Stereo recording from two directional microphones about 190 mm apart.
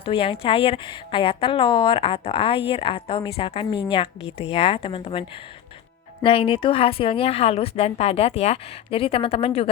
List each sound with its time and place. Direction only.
0.0 s a woman's voice: 25° left (ahead or behind)
6.2 s a woman's voice: 30° left (ahead or behind)